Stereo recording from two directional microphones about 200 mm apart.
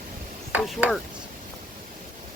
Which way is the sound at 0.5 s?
5° right (ahead or behind).